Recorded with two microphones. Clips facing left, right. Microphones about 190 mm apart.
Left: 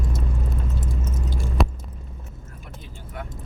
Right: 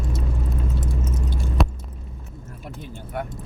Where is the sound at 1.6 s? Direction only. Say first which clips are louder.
Even; centre (ahead or behind).